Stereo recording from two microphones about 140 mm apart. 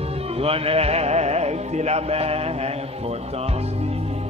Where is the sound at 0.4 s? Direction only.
45° right (ahead or behind).